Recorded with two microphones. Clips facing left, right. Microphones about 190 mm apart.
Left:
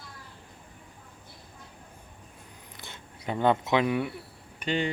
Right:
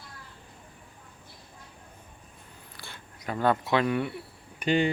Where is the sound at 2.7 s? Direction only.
20° left (ahead or behind).